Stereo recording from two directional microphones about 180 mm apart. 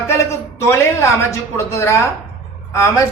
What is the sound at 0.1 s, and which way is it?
A man's voice, 15° left (ahead or behind).